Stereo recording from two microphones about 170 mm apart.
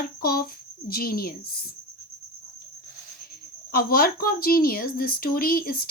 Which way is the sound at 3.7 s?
60° left (ahead or behind).